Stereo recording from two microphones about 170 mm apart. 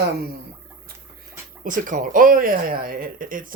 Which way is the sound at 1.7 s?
50° right (ahead or behind).